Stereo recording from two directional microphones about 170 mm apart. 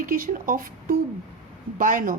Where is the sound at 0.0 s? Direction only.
55° right (ahead or behind).